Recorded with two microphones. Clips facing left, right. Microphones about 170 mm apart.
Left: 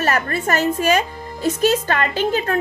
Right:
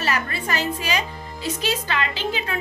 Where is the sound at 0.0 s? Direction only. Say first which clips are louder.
Left 5 dB; 50° left (ahead or behind).